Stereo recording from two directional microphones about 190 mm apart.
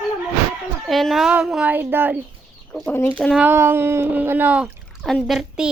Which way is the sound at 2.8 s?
10° left (ahead or behind).